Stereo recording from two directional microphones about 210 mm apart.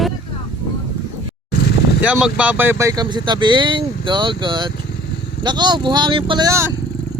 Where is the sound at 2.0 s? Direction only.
5° right (ahead or behind).